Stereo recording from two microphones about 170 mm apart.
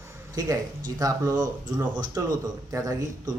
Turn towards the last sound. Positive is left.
turn(degrees=-20)  # may be behind; listen again after turning